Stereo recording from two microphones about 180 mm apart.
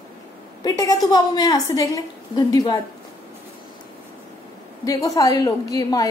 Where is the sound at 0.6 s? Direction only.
20° left (ahead or behind).